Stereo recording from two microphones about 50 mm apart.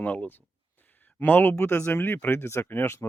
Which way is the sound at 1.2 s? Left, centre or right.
Left.